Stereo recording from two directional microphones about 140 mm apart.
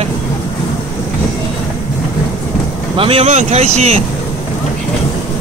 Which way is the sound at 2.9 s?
40° right (ahead or behind).